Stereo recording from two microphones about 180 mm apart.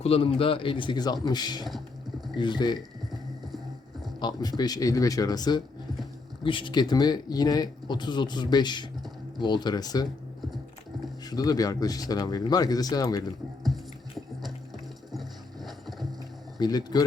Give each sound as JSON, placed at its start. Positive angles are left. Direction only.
{"t": 0.0, "sound": "speech", "side_deg": 30}
{"t": 4.2, "sound": "speech", "side_deg": 20}
{"t": 11.3, "sound": "speech", "side_deg": 20}
{"t": 15.1, "sound": "clip-clop", "side_deg": 0}
{"t": 16.6, "sound": "speech", "side_deg": 20}